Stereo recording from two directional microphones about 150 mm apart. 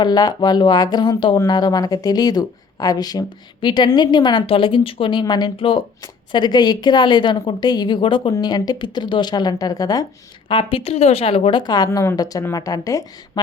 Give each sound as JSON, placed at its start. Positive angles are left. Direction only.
{"t": 0.0, "sound": "speech", "side_deg": 25}
{"t": 10.5, "sound": "a woman's voice", "side_deg": 35}
{"t": 11.6, "sound": "speech", "side_deg": 30}